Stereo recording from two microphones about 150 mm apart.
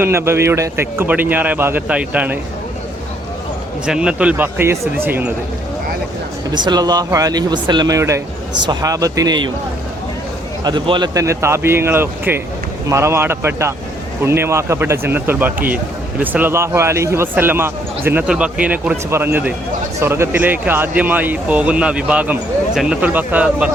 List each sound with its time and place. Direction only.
0.0 s speech: 15° right (ahead or behind)
3.8 s speech: 5° right (ahead or behind)
6.5 s speech: 30° right (ahead or behind)
10.6 s speech: 30° right (ahead or behind); by 23.7 s 10° right (ahead or behind)